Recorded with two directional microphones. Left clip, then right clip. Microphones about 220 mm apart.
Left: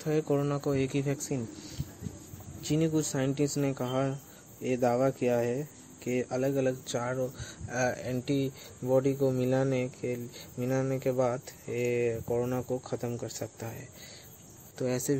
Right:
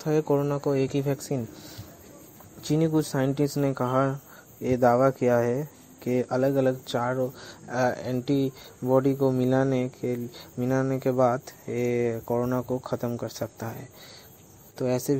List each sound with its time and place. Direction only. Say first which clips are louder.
0.0 s speech: right 5 dB; 15° right (ahead or behind)
2.6 s speech: right 4 dB; 20° right (ahead or behind)
14.8 s speech: right 5 dB; 15° right (ahead or behind)